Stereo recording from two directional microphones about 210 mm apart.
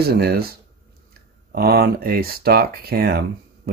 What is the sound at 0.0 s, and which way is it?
Speech, 50° right (ahead or behind).